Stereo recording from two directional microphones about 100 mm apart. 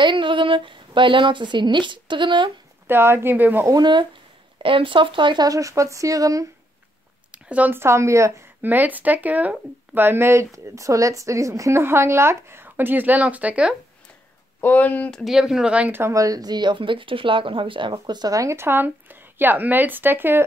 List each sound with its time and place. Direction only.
0.0 s speech: 55° right (ahead or behind)
2.9 s speech: 25° right (ahead or behind)
3.6 s speech: 45° right (ahead or behind)
4.6 s speech: 60° right (ahead or behind)
5.5 s speech: 35° right (ahead or behind)
7.2 s a sound: 15° right (ahead or behind)
7.8 s speech: 30° right (ahead or behind)
8.6 s speech: 15° right (ahead or behind)
14.6 s speech: 15° left (ahead or behind)
15.0 s speech: centre (ahead or behind)
16.0 s speech: 35° right (ahead or behind); by 17.9 s 55° right (ahead or behind)
17.9 s speech: 45° right (ahead or behind); by 20.4 s 20° right (ahead or behind)